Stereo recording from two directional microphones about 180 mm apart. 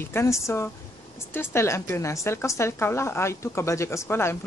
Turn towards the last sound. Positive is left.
turn(degrees=15)  # may be behind; listen again after turning